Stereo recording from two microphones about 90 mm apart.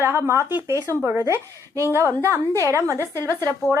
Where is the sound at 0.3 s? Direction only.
30° right (ahead or behind).